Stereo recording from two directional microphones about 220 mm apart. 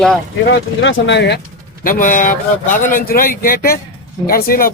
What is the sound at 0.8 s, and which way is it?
Speech, 50° left (ahead or behind).